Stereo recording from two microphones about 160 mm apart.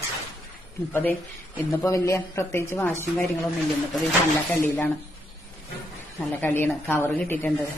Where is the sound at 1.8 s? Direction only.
20° left (ahead or behind).